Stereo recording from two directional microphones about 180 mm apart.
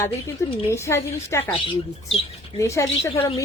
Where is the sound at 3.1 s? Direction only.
30° left (ahead or behind).